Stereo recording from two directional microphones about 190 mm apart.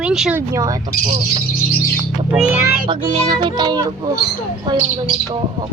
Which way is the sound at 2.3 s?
5° right (ahead or behind).